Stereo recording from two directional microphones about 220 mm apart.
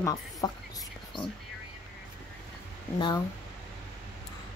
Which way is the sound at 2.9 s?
20° left (ahead or behind).